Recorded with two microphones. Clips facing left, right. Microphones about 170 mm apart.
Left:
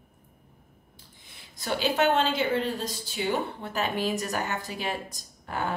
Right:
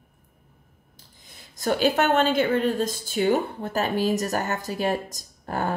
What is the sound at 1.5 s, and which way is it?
A woman's voice, 45° right (ahead or behind).